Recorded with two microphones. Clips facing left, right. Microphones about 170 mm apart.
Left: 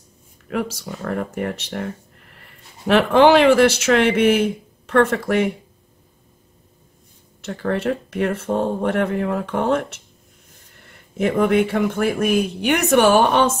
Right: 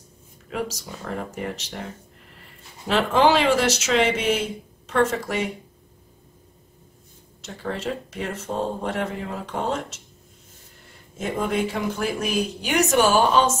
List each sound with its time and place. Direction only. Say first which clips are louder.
0.5 s speech: left 5 dB; 55° left (ahead or behind)
2.9 s speech: left 6 dB; 60° left (ahead or behind)
7.4 s speech: left 7 dB; 60° left (ahead or behind)